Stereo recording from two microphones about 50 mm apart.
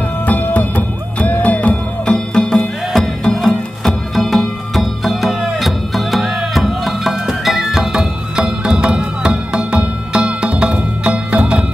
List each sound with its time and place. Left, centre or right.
0.3 s music: left
2.0 s music: centre
2.9 s music: centre; by 11.6 s right